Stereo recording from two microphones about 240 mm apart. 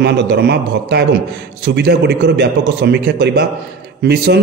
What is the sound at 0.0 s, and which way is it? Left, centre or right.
A man's voice, right.